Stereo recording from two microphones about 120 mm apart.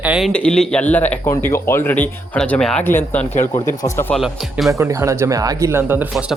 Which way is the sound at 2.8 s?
15° left (ahead or behind).